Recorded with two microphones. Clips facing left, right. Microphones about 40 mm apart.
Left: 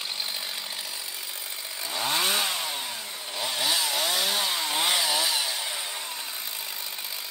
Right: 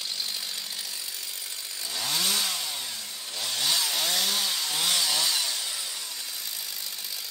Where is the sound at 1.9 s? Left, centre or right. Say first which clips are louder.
Left 3 dB; left.